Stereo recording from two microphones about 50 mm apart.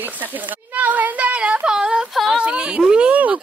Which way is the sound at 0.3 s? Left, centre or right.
Right.